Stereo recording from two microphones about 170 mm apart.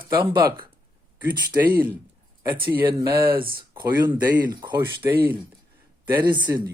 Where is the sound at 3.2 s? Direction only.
60° right (ahead or behind).